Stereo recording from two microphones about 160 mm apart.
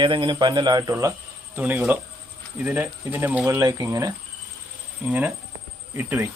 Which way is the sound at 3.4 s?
20° right (ahead or behind).